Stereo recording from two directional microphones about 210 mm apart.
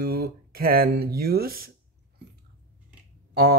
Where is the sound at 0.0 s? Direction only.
50° right (ahead or behind).